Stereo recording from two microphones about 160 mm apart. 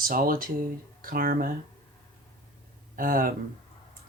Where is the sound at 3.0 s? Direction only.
60° right (ahead or behind).